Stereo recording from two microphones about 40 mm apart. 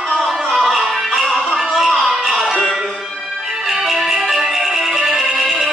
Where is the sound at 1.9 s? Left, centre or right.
Centre.